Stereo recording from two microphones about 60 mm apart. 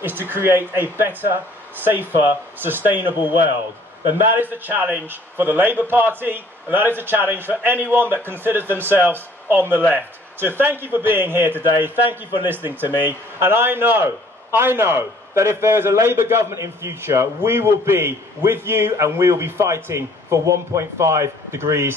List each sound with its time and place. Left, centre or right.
0.3 s a man's voice: right
4.4 s a man's voice: right